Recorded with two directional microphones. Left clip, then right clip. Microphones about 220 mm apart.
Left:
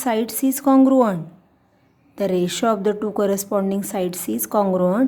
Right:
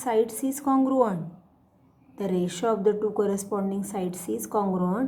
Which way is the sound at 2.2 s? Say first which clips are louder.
Left 7 dB; 35° left (ahead or behind).